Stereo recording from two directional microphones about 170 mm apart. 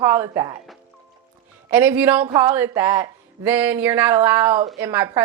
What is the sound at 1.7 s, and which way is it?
Speech, 10° right (ahead or behind).